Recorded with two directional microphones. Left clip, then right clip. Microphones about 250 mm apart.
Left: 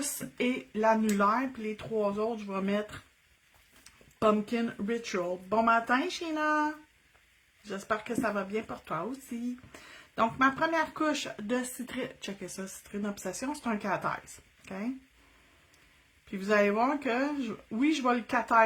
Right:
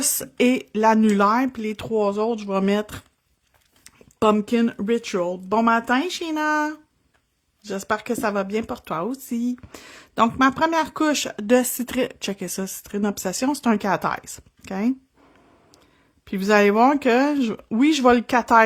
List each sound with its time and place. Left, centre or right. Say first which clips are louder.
0.3 s speech: right 11 dB; right
3.8 s speech: right 7 dB; right
16.3 s speech: right 9 dB; right